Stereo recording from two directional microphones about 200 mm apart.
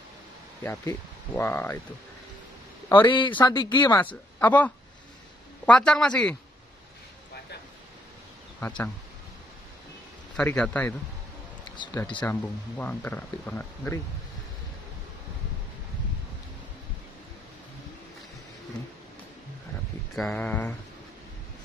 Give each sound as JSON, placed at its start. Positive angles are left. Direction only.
{"t": 0.7, "sound": "speech", "side_deg": 10}
{"t": 2.9, "sound": "speech", "side_deg": 25}
{"t": 3.9, "sound": "speech", "side_deg": 10}
{"t": 8.5, "sound": "speech", "side_deg": 10}
{"t": 10.3, "sound": "speech", "side_deg": 5}
{"t": 12.2, "sound": "speech", "side_deg": 10}
{"t": 20.2, "sound": "speech", "side_deg": 5}